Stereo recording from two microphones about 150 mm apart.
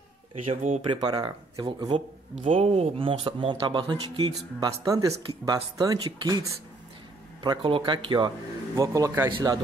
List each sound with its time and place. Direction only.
0.5 s speech: 50° right (ahead or behind)
0.8 s speech: 30° right (ahead or behind)